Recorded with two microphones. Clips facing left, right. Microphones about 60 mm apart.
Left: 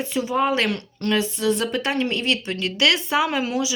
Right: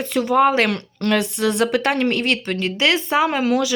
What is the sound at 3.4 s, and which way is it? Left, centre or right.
Speech, right.